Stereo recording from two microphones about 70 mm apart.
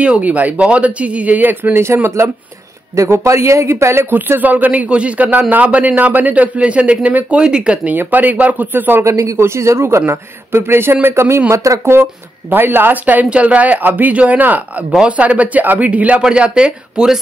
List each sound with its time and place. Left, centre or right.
0.0 s a man's voice: centre; by 4.1 s right
4.1 s a man's voice: right
9.0 s a man's voice: right
11.9 s a man's voice: right; by 17.2 s centre